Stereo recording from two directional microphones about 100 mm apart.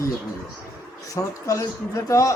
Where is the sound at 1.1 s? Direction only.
35° left (ahead or behind).